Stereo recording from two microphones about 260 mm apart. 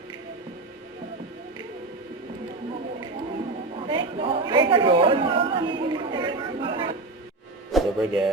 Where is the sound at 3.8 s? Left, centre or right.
Centre.